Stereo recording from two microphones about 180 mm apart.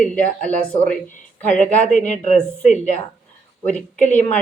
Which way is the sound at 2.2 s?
40° left (ahead or behind).